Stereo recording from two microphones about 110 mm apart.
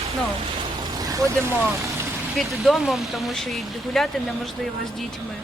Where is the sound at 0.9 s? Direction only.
35° right (ahead or behind).